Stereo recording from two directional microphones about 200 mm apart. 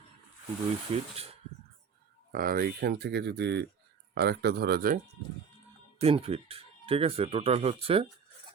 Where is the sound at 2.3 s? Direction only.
45° right (ahead or behind).